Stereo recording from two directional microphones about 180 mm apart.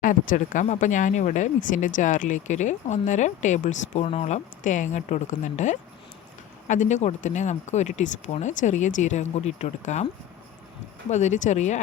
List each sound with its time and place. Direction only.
0.0 s speech: 45° left (ahead or behind)
11.1 s speech: 40° left (ahead or behind)